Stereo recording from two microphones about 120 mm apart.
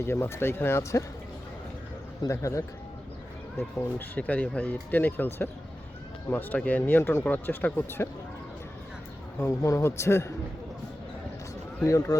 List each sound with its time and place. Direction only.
0.0 s speech: 20° left (ahead or behind)
2.2 s speech: 25° left (ahead or behind)
9.4 s speech: 25° left (ahead or behind)
11.9 s speech: 30° left (ahead or behind)